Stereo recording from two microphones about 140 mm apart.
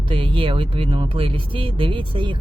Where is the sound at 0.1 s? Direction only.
40° right (ahead or behind).